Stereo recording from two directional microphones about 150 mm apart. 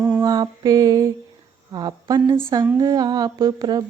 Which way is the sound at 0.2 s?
25° right (ahead or behind).